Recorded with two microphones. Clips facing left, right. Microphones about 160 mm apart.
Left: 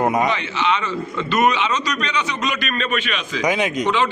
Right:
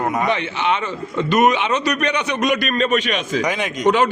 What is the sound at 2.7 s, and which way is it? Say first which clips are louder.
Speech: right 5 dB; 45° right (ahead or behind).